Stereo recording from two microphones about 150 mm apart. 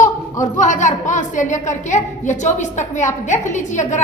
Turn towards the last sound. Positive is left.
turn(degrees=55)  # may be behind; listen again after turning